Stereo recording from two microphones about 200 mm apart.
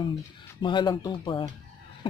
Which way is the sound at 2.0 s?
25° left (ahead or behind).